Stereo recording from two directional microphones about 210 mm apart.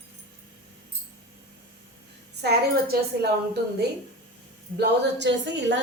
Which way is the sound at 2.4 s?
50° right (ahead or behind).